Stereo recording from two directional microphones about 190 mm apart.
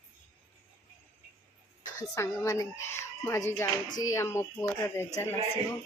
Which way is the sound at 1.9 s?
15° left (ahead or behind).